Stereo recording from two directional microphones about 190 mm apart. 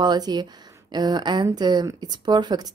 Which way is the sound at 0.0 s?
25° right (ahead or behind).